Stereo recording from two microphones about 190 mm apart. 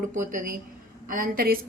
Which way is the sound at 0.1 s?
40° right (ahead or behind).